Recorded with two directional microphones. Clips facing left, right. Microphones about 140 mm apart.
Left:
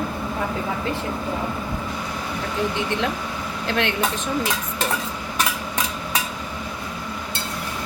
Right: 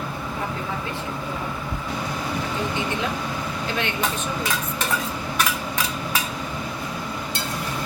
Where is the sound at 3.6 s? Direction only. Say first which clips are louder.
Left 5 dB; 90° left.